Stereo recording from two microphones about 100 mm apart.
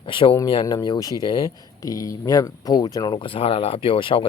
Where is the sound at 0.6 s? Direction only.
40° left (ahead or behind).